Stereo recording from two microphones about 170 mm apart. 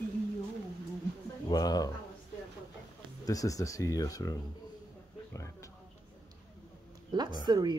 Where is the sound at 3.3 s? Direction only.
20° left (ahead or behind).